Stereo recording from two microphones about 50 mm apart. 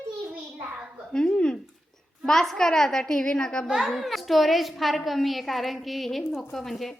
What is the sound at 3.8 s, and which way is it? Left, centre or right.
A woman's voice, centre.